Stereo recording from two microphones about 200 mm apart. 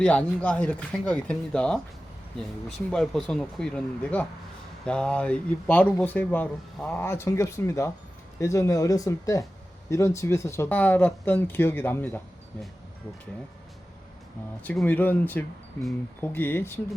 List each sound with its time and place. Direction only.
0.0 s speech: 5° left (ahead or behind)
14.6 s speech: 10° left (ahead or behind)